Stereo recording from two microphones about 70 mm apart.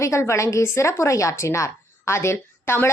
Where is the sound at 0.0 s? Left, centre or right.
Left.